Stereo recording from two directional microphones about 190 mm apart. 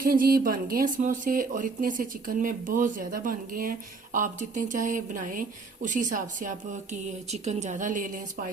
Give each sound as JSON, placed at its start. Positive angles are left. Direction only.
{"t": 0.0, "sound": "speech", "side_deg": -50}